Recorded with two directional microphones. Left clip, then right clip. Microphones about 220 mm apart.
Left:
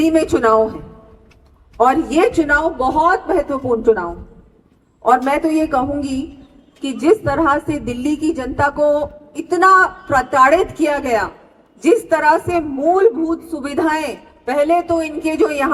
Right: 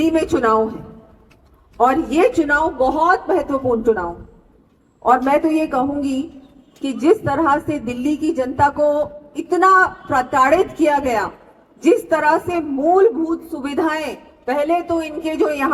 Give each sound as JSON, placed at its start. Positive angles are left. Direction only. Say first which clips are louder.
{"t": 0.0, "sound": "a woman's voice", "louder": "left 3 dB", "side_deg": 25}
{"t": 1.8, "sound": "a woman's voice", "louder": "left 1 dB", "side_deg": 25}
{"t": 5.0, "sound": "a woman's voice", "louder": "even", "side_deg": 25}